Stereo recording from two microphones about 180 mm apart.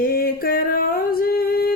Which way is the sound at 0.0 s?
55° left (ahead or behind).